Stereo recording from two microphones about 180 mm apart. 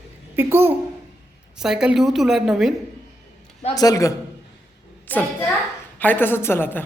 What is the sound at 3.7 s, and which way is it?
A man's voice, 20° left (ahead or behind).